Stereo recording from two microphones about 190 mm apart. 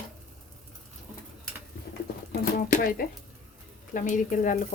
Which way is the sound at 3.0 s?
50° left (ahead or behind).